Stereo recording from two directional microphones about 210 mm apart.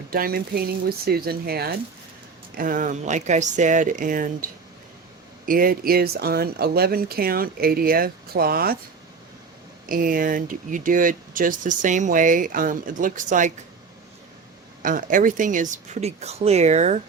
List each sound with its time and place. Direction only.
0.1 s speech: 45° right (ahead or behind)
5.5 s speech: 45° right (ahead or behind)
9.9 s speech: 40° right (ahead or behind)
14.8 s speech: 40° right (ahead or behind)